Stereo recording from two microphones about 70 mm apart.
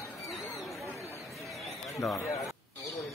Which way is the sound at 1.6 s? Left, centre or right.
Centre.